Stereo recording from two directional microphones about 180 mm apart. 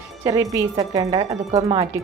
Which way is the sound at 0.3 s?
15° right (ahead or behind).